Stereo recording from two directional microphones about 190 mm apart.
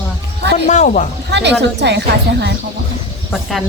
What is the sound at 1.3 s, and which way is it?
Speech, 65° right (ahead or behind).